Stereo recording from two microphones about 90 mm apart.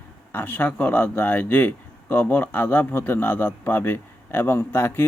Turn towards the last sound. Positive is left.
turn(degrees=25)  # may be behind; listen again after turning